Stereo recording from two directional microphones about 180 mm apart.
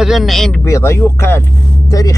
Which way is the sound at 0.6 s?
15° left (ahead or behind).